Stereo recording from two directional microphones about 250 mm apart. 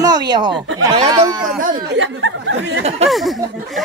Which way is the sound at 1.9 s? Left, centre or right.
Right.